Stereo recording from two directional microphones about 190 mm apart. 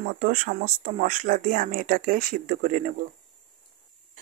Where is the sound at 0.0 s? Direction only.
45° right (ahead or behind).